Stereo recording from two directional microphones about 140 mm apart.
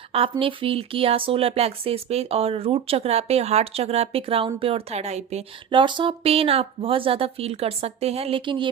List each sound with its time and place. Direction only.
0.1 s speech: 40° right (ahead or behind)
5.7 s speech: 35° right (ahead or behind)